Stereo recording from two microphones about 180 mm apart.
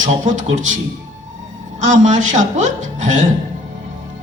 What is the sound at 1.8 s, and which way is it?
Speech, 45° right (ahead or behind).